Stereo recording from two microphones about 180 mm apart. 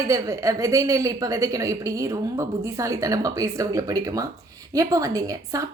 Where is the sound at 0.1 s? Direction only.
15° right (ahead or behind).